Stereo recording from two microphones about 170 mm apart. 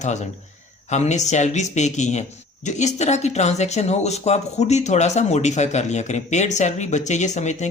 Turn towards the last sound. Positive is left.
turn(degrees=45)  # may be behind; listen again after turning